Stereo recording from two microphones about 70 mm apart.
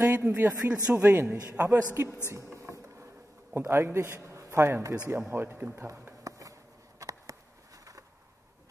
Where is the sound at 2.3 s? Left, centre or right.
Right.